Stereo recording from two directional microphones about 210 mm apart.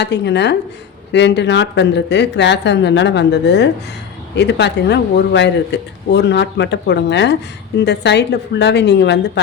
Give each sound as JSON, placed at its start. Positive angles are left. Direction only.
{"t": 0.0, "sound": "speech", "side_deg": 55}